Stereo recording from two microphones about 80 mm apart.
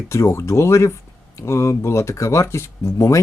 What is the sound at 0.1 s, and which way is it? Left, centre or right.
Speech, left.